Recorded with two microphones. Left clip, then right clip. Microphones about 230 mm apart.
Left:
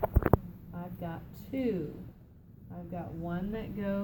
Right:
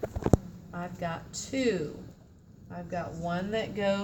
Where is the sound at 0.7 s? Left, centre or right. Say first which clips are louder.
Right 7 dB; centre.